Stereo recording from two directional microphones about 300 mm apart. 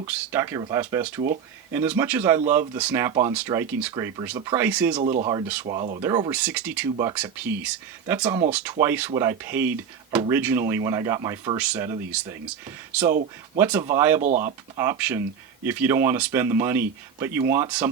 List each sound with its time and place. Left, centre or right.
0.0 s speech: centre
4.9 s speech: right; by 6.7 s centre
6.9 s speech: centre
14.2 s speech: right
14.4 s speech: centre